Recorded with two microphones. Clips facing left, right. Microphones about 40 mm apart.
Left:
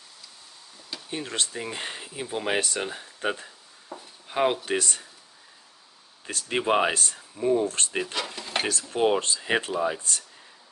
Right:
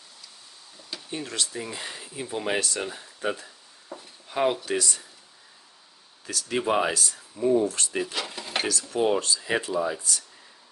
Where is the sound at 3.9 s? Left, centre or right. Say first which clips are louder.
Even; centre.